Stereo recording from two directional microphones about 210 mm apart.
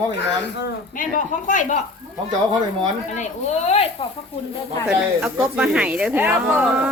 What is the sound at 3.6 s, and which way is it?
Speech, 30° left (ahead or behind).